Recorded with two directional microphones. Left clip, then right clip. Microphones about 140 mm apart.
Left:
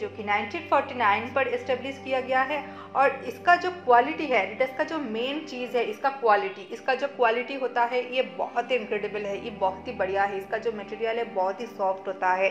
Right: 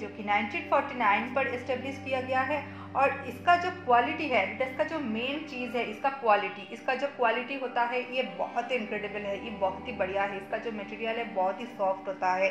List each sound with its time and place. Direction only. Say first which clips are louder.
0.2 s a woman's voice: left 1 dB; 40° left (ahead or behind)